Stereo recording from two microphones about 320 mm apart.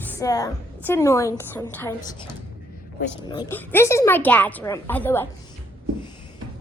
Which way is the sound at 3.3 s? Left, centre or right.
Centre.